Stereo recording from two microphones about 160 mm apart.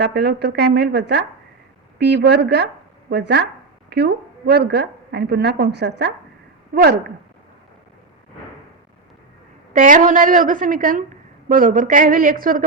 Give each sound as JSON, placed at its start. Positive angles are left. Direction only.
{"t": 0.0, "sound": "a woman's voice", "side_deg": -90}
{"t": 6.7, "sound": "speech", "side_deg": -70}
{"t": 9.7, "sound": "a woman's voice", "side_deg": -55}